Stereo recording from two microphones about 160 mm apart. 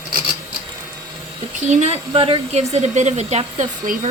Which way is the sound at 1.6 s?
45° right (ahead or behind).